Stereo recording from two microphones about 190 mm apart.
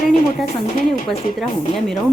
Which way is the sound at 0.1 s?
45° left (ahead or behind).